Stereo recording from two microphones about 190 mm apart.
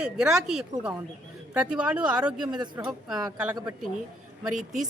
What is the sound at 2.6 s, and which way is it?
Speech, 15° right (ahead or behind).